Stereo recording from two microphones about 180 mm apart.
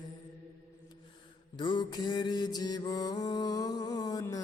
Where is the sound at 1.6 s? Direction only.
25° left (ahead or behind).